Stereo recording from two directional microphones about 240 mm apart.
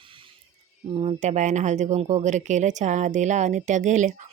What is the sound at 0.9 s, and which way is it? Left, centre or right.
Speech, right.